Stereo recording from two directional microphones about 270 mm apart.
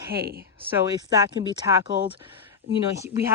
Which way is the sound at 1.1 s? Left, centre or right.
Centre.